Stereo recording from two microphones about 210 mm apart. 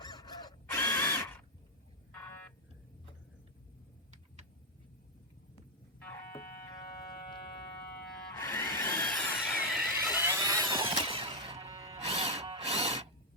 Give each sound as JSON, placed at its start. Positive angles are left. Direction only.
{"t": 0.0, "sound": "tools", "side_deg": 20}
{"t": 2.1, "sound": "a sound", "side_deg": 10}
{"t": 8.4, "sound": "tools", "side_deg": 10}